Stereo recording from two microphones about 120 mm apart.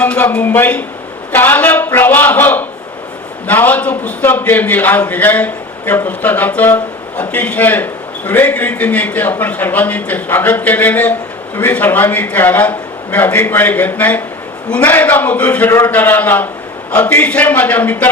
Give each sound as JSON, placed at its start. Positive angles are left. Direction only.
{"t": 0.0, "sound": "a man's voice", "side_deg": 15}